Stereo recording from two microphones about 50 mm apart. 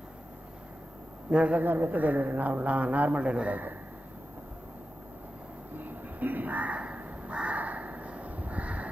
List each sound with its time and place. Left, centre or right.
1.3 s a man's voice: right
1.6 s a woman's voice: right
5.8 s crow: right